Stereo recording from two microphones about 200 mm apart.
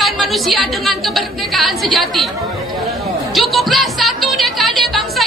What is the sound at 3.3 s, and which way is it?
Speech, centre (ahead or behind).